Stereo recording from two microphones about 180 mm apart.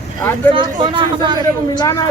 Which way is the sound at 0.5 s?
25° right (ahead or behind).